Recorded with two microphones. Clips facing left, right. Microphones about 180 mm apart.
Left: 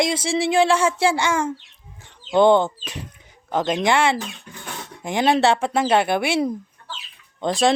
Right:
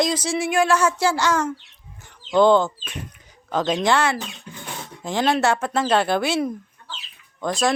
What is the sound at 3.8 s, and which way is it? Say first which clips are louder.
Speech: left 2 dB; 20° left (ahead or behind).